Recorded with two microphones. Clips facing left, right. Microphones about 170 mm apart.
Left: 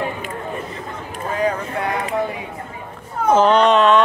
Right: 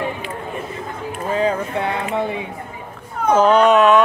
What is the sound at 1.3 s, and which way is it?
Speech, 25° right (ahead or behind).